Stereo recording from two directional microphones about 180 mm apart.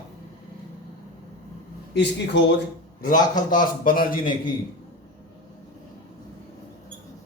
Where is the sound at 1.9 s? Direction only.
80° left.